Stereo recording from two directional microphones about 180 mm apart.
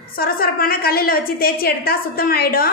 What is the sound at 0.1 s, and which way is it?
A woman's voice, 55° left (ahead or behind).